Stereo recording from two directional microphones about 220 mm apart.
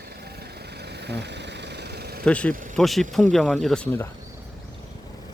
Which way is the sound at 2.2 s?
5° left (ahead or behind).